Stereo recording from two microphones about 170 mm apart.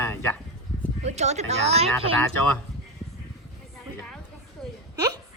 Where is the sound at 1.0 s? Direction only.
40° right (ahead or behind).